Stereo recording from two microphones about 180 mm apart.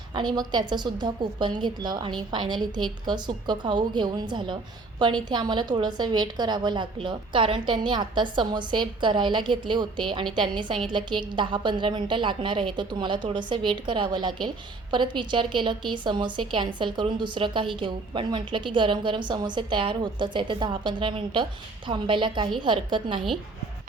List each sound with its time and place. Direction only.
0.1 s a woman's voice: 25° right (ahead or behind)